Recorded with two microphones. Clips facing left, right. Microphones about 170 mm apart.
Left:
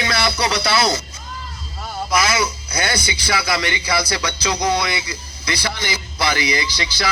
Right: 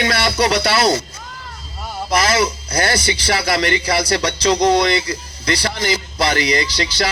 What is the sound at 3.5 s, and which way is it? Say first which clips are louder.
Speech: right 4 dB; 40° right (ahead or behind).